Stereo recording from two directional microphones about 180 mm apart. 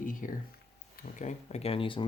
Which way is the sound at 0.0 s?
50° left (ahead or behind).